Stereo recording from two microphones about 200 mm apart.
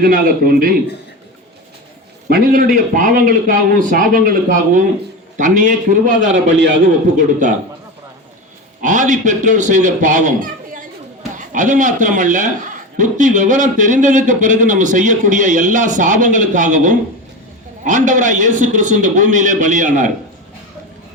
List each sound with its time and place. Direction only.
0.0 s speech: 45° right (ahead or behind)
2.3 s a man's voice: 45° right (ahead or behind)
6.3 s a man's voice: 65° right (ahead or behind)
7.2 s a man's voice: 40° right (ahead or behind)
8.8 s a man's voice: 40° right (ahead or behind)
11.3 s a man's voice: 40° right (ahead or behind)